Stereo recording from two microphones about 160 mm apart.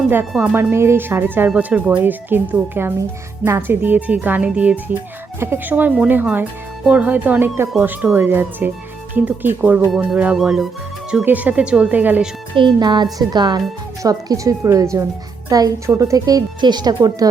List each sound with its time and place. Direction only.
0.5 s speech: 15° right (ahead or behind)
12.5 s speech: 30° right (ahead or behind)